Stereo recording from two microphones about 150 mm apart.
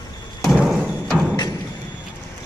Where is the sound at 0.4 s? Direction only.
5° right (ahead or behind).